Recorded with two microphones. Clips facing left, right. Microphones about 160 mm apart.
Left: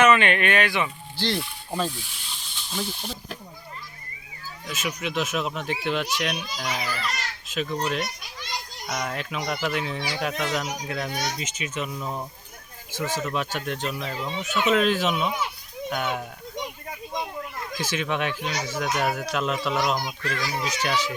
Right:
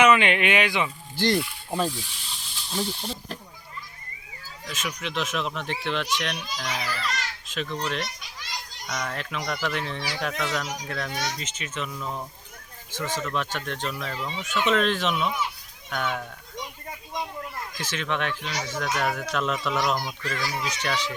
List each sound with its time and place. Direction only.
0.0 s speech: 15° right (ahead or behind)
1.1 s speech: 50° right (ahead or behind)
2.3 s speech: centre (ahead or behind)
4.6 s a child's voice: 5° left (ahead or behind)
17.7 s a child's voice: 10° left (ahead or behind)